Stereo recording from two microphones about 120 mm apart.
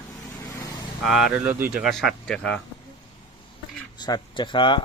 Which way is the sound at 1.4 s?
15° right (ahead or behind).